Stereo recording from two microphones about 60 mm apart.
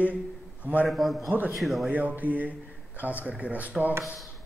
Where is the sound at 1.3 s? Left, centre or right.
Right.